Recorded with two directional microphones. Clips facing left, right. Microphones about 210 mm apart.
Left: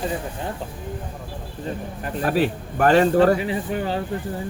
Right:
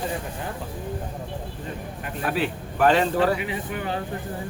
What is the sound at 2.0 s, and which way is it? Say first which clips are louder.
A man's voice: left 5 dB; 40° left (ahead or behind).